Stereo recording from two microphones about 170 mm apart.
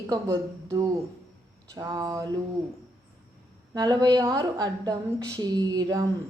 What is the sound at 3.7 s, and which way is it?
A woman's voice, 25° right (ahead or behind).